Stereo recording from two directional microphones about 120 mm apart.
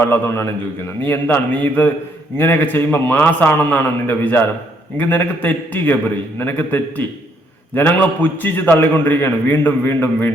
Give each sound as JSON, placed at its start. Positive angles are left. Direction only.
{"t": 0.0, "sound": "a man's voice", "side_deg": 20}